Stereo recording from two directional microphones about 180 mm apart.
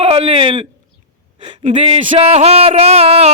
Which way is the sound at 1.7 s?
30° right (ahead or behind).